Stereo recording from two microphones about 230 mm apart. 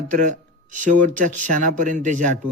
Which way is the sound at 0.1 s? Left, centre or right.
Right.